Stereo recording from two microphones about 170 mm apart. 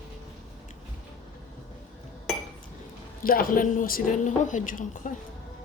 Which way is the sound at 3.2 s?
55° left (ahead or behind).